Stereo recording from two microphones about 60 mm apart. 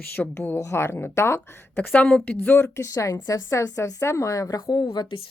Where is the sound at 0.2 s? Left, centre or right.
Centre.